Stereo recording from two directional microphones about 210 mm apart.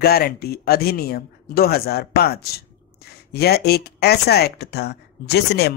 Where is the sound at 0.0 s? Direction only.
45° left (ahead or behind).